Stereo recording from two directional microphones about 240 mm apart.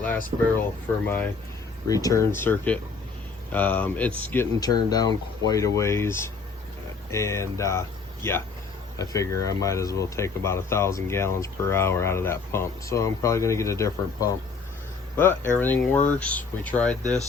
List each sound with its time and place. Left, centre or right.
1.0 s speech: centre